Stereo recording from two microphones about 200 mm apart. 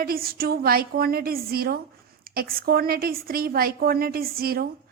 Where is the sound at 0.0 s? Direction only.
50° right (ahead or behind).